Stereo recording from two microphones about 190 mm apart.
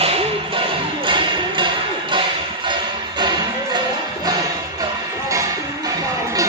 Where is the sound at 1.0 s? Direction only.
25° right (ahead or behind).